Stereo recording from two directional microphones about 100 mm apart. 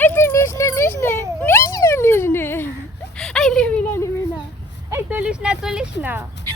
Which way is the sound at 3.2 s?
5° left (ahead or behind).